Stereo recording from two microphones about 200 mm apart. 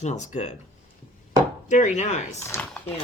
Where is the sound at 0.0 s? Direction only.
35° left (ahead or behind).